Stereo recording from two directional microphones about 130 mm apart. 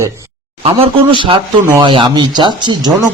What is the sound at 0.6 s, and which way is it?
Speech, 40° right (ahead or behind).